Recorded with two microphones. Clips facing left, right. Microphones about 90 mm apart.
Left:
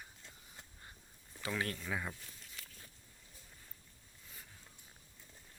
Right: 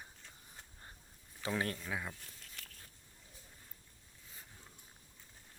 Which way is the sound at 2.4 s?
60° right (ahead or behind).